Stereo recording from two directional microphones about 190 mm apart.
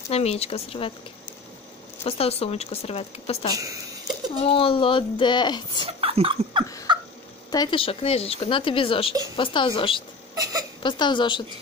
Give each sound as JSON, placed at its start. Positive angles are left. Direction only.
{"t": 0.1, "sound": "speech", "side_deg": 35}
{"t": 2.0, "sound": "speech", "side_deg": 30}
{"t": 5.8, "sound": "speech", "side_deg": -30}
{"t": 6.9, "sound": "a sound", "side_deg": -25}
{"t": 7.5, "sound": "speech", "side_deg": 25}